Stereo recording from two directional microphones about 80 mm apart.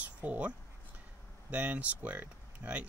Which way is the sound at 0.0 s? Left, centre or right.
Centre.